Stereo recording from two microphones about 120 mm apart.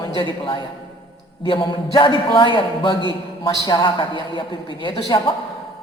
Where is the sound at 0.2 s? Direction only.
45° left (ahead or behind).